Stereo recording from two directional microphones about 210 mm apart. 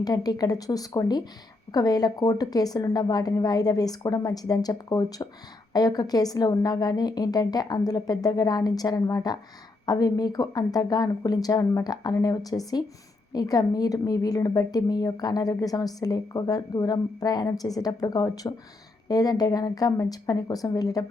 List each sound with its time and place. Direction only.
0.0 s a woman's voice: 20° left (ahead or behind)